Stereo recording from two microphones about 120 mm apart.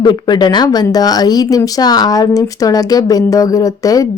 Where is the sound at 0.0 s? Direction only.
40° left (ahead or behind).